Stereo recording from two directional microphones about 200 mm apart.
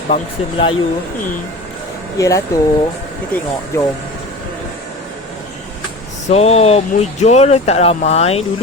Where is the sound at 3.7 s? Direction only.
15° left (ahead or behind).